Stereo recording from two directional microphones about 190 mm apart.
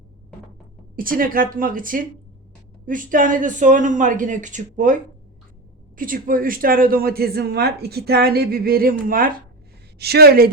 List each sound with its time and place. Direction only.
0.9 s speech: 45° right (ahead or behind)
6.0 s a woman's voice: 50° right (ahead or behind)